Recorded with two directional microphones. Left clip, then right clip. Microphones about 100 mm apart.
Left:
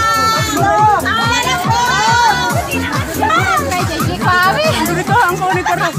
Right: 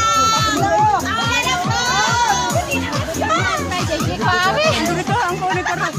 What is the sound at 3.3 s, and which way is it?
Music, 20° right (ahead or behind).